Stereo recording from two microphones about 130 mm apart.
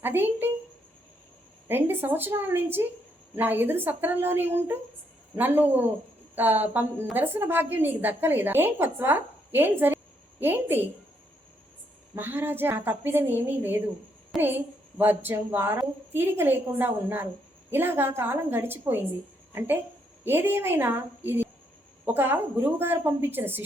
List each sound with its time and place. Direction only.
0.0 s a woman's voice: 15° right (ahead or behind)
1.6 s a woman's voice: 15° right (ahead or behind)
12.1 s a woman's voice: 15° right (ahead or behind)